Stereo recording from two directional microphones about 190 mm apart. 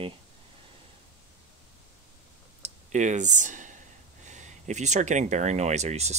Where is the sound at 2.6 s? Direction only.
40° right (ahead or behind).